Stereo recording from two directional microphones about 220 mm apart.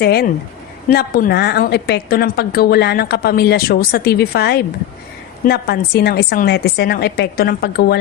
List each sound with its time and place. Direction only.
0.0 s a woman's voice: 45° left (ahead or behind)